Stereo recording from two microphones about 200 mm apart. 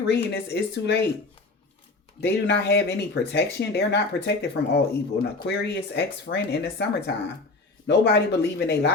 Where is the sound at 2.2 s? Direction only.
55° left (ahead or behind).